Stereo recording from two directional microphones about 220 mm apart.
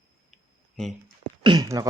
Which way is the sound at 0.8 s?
Centre (ahead or behind).